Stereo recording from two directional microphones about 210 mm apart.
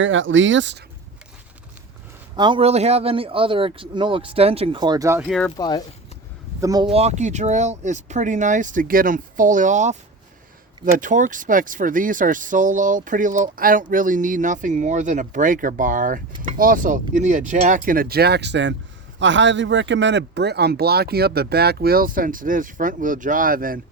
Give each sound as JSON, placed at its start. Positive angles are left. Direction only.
{"t": 0.0, "sound": "speech", "side_deg": -65}
{"t": 2.3, "sound": "a man's voice", "side_deg": -20}
{"t": 5.5, "sound": "speech", "side_deg": 20}
{"t": 6.6, "sound": "speech", "side_deg": -15}
{"t": 6.9, "sound": "speech", "side_deg": -30}
{"t": 16.3, "sound": "a man's voice", "side_deg": -20}
{"t": 16.6, "sound": "speech", "side_deg": -40}